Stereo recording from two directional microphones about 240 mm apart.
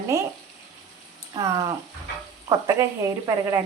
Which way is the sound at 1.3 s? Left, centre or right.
Centre.